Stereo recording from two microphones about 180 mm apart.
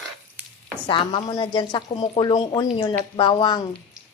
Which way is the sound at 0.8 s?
25° left (ahead or behind).